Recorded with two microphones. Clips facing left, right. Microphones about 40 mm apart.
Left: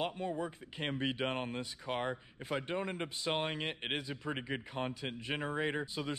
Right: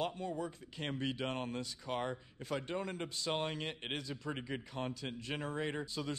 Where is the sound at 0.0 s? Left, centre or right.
Left.